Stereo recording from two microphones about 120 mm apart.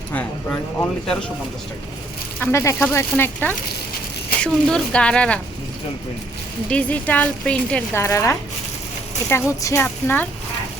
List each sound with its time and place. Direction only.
0.1 s speech: 10° left (ahead or behind)
2.4 s speech: 20° left (ahead or behind)
4.4 s speech: 10° left (ahead or behind)
6.7 s speech: 10° left (ahead or behind)
7.9 s speech: 25° left (ahead or behind)
9.8 s speech: 15° left (ahead or behind)